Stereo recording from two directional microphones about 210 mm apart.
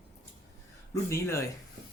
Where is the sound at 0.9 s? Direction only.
15° left (ahead or behind).